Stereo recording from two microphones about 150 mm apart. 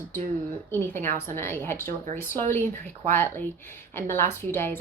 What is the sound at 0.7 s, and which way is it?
A woman's voice, 15° left (ahead or behind).